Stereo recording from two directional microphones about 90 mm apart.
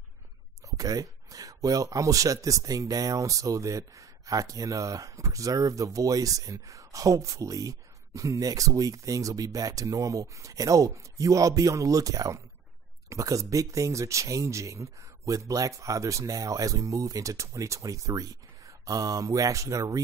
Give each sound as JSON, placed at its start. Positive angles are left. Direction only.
{"t": 0.7, "sound": "speech", "side_deg": -40}